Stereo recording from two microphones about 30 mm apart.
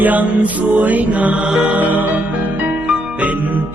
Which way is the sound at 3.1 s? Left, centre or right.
Right.